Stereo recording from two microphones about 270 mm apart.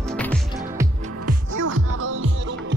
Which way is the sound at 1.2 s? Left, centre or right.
Right.